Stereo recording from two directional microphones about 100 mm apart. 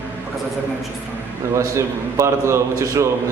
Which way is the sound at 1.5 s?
30° right (ahead or behind).